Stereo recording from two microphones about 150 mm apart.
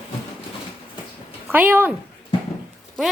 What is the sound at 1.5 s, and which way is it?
Speech, 10° right (ahead or behind).